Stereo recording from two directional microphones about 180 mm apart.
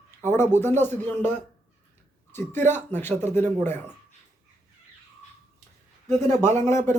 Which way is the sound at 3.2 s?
40° right (ahead or behind).